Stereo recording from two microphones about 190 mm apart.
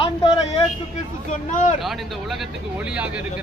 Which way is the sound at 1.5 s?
40° left (ahead or behind).